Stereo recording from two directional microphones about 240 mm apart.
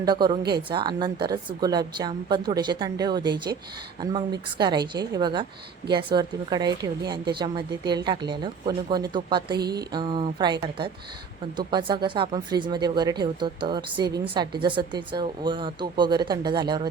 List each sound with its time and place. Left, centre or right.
0.0 s a woman's voice: centre